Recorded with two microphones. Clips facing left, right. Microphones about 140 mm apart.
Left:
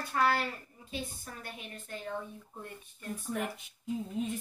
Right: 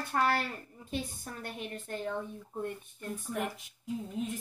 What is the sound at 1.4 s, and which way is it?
Speech, 55° right (ahead or behind).